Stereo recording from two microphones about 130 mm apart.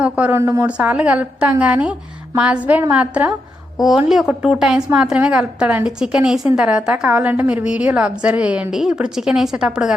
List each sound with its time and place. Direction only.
0.0 s a woman's voice: 15° right (ahead or behind)
0.7 s a woman's voice: 10° right (ahead or behind)